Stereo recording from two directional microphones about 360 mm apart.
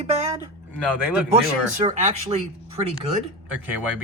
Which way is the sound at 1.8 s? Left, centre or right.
Centre.